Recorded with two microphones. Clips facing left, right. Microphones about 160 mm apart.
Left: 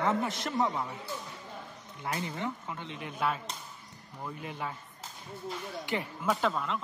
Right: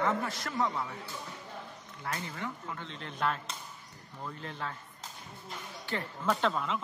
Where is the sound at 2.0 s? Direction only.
20° left (ahead or behind).